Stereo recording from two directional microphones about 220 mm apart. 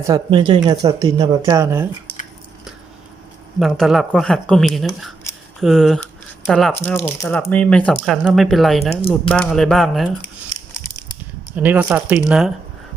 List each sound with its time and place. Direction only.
0.1 s speech: 20° right (ahead or behind)
3.6 s speech: centre (ahead or behind)
11.5 s speech: 5° right (ahead or behind)